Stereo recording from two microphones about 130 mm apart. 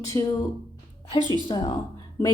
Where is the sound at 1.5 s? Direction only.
40° left (ahead or behind).